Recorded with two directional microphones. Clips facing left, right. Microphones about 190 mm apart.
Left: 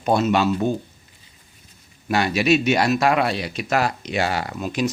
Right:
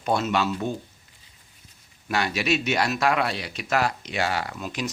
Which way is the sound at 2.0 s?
15° left (ahead or behind).